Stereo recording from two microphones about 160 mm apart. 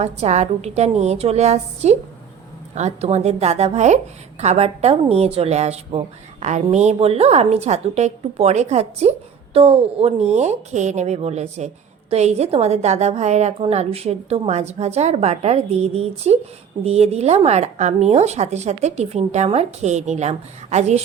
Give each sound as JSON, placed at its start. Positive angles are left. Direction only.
{"t": 0.0, "sound": "a woman's voice", "side_deg": -45}